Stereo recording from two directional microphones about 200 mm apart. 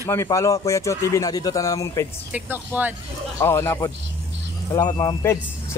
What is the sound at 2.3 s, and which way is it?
Speech, 10° right (ahead or behind).